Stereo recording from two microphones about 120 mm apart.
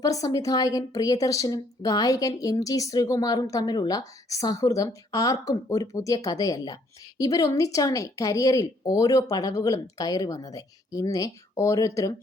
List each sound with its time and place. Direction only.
0.0 s a woman's voice: 30° left (ahead or behind)